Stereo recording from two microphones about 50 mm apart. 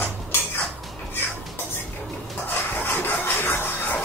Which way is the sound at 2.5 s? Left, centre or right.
Left.